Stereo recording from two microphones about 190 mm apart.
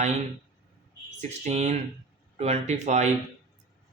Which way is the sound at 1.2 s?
35° right (ahead or behind).